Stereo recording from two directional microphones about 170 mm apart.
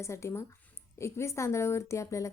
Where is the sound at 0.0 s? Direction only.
15° left (ahead or behind).